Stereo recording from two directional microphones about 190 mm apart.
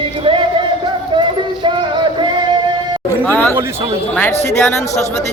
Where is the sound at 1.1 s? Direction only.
25° right (ahead or behind).